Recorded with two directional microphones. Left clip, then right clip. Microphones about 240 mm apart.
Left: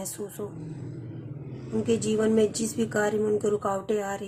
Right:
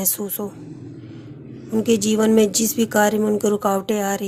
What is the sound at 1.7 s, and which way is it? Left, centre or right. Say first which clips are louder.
Speech: right 7 dB; right.